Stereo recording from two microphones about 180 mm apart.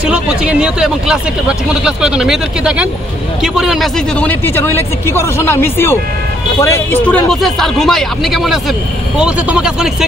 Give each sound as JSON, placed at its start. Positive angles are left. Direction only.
{"t": 0.1, "sound": "speech", "side_deg": -5}